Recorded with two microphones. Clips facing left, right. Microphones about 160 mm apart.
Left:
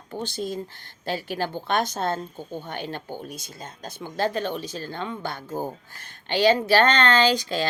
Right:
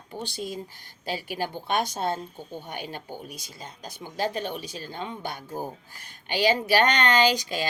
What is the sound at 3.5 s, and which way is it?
Speech, 45° left (ahead or behind).